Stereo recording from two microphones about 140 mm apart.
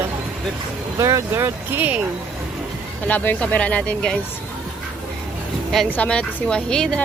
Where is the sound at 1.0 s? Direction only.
20° right (ahead or behind).